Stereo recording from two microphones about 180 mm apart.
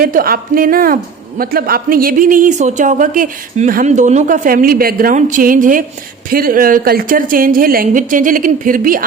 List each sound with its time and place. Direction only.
0.0 s speech: 55° right (ahead or behind)